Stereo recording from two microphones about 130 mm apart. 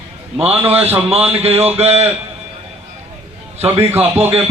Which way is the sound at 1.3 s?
50° right (ahead or behind).